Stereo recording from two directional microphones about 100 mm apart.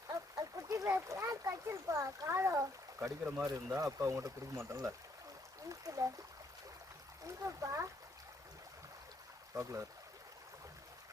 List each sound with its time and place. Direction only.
0.1 s a sound: 35° right (ahead or behind)
3.0 s speech: 20° right (ahead or behind)
3.5 s speech: 30° right (ahead or behind)
7.4 s speech: 30° right (ahead or behind)
9.5 s speech: 35° right (ahead or behind)